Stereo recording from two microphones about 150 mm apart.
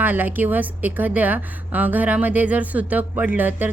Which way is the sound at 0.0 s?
10° right (ahead or behind).